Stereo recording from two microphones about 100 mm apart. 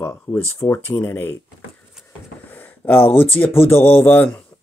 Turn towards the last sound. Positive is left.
turn(degrees=15)  # may be behind; listen again after turning